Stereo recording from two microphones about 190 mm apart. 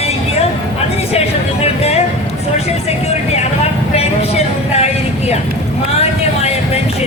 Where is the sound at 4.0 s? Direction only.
35° left (ahead or behind).